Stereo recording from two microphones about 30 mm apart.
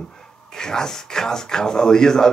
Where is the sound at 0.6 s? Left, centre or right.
Left.